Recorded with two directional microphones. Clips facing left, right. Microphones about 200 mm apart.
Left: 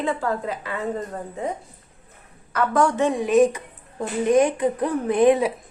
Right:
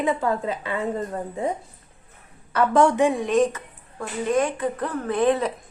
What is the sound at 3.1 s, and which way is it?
A woman's voice, 5° left (ahead or behind).